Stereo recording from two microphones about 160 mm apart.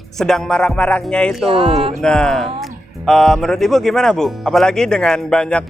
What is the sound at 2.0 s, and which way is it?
Speech, 5° left (ahead or behind).